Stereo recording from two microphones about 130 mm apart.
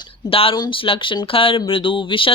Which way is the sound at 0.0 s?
45° left (ahead or behind).